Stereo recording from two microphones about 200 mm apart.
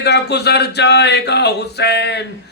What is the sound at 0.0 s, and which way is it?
Male singing, 55° left (ahead or behind).